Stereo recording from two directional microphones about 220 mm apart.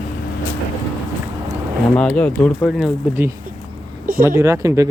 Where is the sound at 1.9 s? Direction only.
5° left (ahead or behind); by 4.9 s 15° right (ahead or behind).